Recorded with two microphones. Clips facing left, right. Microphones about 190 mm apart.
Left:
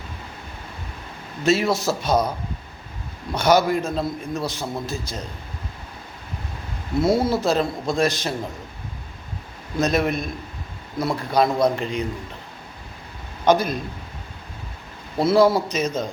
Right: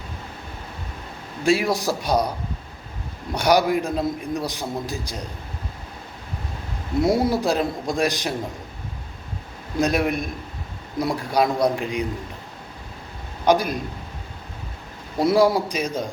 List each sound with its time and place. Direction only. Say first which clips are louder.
1.5 s a man's voice: even; 15° right (ahead or behind)
3.3 s a man's voice: left 1 dB; 15° right (ahead or behind)
7.0 s a man's voice: even; 15° right (ahead or behind)
9.8 s a man's voice: even; 15° right (ahead or behind)
13.4 s a man's voice: left 1 dB; 10° right (ahead or behind)
15.2 s a man's voice: left 1 dB; 15° right (ahead or behind)